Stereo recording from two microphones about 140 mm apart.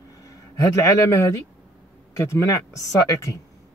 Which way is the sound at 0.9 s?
20° left (ahead or behind).